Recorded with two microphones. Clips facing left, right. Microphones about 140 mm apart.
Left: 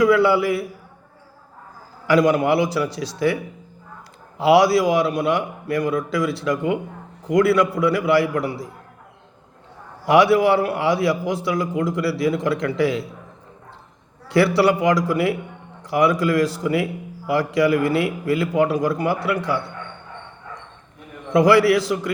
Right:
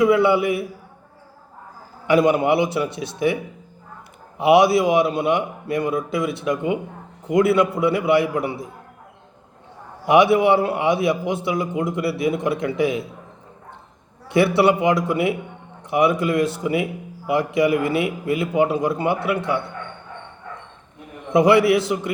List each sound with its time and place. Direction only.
0.0 s a man's voice: 20° right (ahead or behind)
2.0 s a man's voice: 25° right (ahead or behind)
4.4 s a man's voice: 20° right (ahead or behind)
10.1 s a man's voice: 20° right (ahead or behind)
14.3 s a man's voice: 20° right (ahead or behind)
21.2 s a man's voice: 20° right (ahead or behind)